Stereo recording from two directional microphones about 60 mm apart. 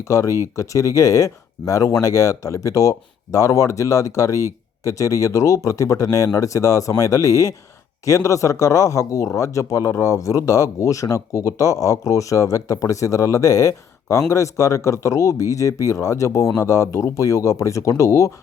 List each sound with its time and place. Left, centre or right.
0.1 s speech: left